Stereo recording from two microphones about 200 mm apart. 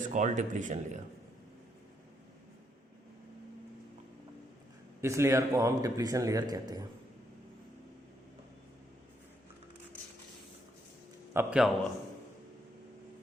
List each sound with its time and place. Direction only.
0.0 s speech: 40° right (ahead or behind)
4.9 s speech: 15° right (ahead or behind)
11.3 s a man's voice: 5° right (ahead or behind)